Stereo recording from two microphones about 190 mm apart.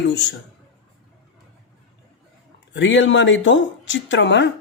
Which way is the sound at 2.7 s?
75° left (ahead or behind).